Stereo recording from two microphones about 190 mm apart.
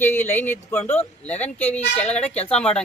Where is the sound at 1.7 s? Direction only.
35° left (ahead or behind).